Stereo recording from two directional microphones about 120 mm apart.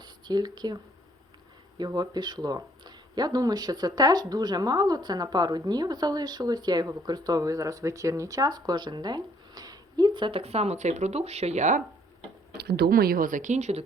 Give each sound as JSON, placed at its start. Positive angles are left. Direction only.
{"t": 0.0, "sound": "speech", "side_deg": -35}
{"t": 1.8, "sound": "speech", "side_deg": -35}
{"t": 10.4, "sound": "speech", "side_deg": -60}
{"t": 13.3, "sound": "speech", "side_deg": -85}